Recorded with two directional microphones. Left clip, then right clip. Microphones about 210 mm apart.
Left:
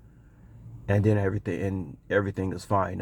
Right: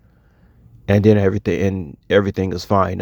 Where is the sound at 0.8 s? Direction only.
30° right (ahead or behind).